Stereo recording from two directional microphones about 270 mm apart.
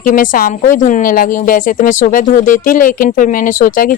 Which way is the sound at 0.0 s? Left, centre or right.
Left.